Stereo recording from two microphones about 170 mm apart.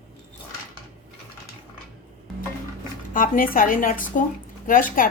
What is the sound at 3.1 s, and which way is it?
A woman's voice, 55° left (ahead or behind).